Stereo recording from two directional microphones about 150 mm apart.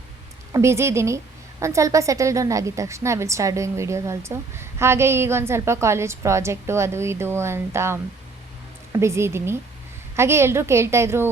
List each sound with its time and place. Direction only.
0.5 s a woman's voice: 20° right (ahead or behind)